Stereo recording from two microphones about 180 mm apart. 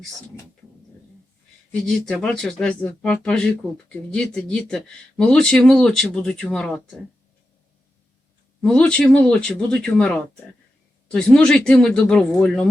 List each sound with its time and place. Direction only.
2.0 s speech: 5° left (ahead or behind)
8.6 s speech: 5° left (ahead or behind)